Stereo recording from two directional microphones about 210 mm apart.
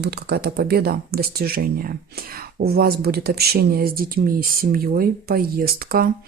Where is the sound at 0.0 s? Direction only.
50° right (ahead or behind).